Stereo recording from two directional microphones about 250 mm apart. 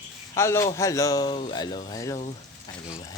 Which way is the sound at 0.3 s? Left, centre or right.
Centre.